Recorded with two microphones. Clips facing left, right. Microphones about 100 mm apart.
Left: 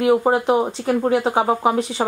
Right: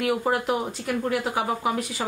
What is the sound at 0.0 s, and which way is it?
Speech, 30° left (ahead or behind).